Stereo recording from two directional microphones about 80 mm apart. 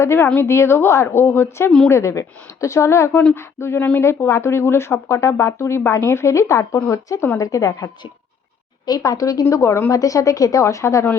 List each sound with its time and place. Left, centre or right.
0.0 s a woman's voice: left
8.9 s a woman's voice: left